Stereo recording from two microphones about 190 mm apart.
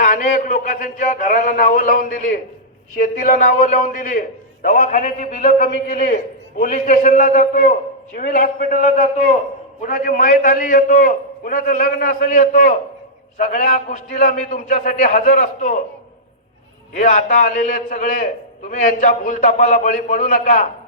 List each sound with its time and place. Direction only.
0.0 s a man's voice: 45° left (ahead or behind)
16.9 s a man's voice: 45° left (ahead or behind)